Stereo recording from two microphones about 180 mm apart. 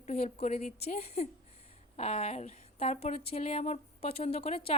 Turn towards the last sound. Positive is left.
turn(degrees=30)  # may be behind; listen again after turning